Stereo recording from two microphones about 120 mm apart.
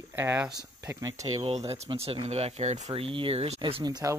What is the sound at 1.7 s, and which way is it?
Speech, 55° right (ahead or behind).